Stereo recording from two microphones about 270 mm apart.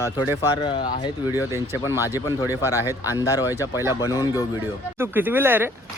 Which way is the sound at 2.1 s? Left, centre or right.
Centre.